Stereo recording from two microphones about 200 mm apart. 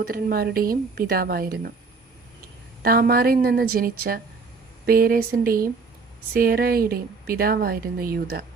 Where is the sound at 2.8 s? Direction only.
50° right (ahead or behind).